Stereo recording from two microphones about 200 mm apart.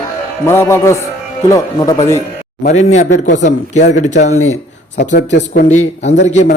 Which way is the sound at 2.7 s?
35° left (ahead or behind).